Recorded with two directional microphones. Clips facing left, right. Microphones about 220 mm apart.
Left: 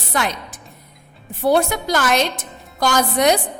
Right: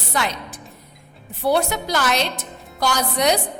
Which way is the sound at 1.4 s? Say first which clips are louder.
Left 3 dB; 50° left (ahead or behind).